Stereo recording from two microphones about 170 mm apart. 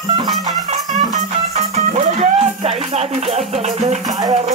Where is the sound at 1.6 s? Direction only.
40° right (ahead or behind).